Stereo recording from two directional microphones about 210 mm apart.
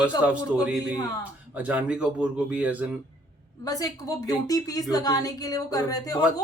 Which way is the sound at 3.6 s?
15° left (ahead or behind).